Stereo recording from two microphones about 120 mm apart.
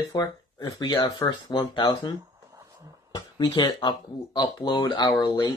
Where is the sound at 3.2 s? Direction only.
40° left (ahead or behind).